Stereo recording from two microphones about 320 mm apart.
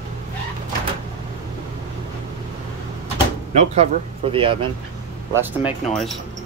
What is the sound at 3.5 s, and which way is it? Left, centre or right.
Speech, centre.